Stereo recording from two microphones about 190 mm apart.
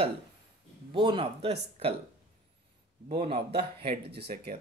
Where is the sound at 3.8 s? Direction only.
55° right (ahead or behind).